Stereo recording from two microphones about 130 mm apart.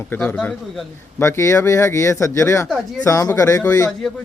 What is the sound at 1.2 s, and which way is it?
Speech, 20° left (ahead or behind).